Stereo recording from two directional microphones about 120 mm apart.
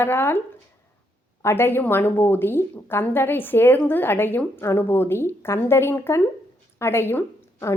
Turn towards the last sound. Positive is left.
turn(degrees=15)  # may be behind; listen again after turning